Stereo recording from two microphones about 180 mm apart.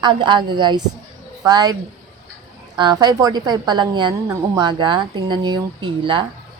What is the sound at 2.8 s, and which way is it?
A woman's voice, 25° right (ahead or behind).